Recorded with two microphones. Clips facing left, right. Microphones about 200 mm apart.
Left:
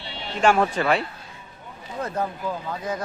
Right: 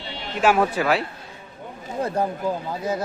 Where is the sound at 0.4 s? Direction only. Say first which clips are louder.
Even; 5° right (ahead or behind).